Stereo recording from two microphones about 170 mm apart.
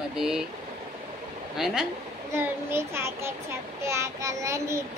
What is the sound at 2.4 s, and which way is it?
A child's voice, 15° right (ahead or behind).